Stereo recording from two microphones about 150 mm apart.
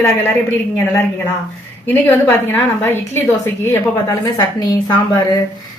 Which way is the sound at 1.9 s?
15° left (ahead or behind).